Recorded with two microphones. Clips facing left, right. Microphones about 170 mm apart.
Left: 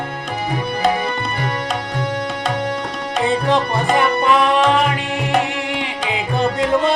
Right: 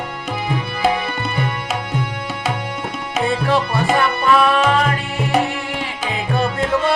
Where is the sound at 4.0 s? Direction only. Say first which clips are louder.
Left 1 dB; 20° left (ahead or behind).